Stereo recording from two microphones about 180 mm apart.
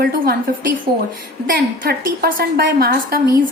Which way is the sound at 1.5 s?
55° right (ahead or behind).